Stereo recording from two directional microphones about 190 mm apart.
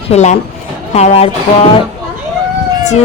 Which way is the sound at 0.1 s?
35° left (ahead or behind).